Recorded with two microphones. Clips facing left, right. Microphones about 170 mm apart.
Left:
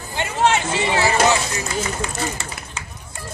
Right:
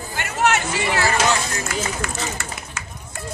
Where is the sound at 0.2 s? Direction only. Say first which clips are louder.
Left 2 dB; 25° left (ahead or behind).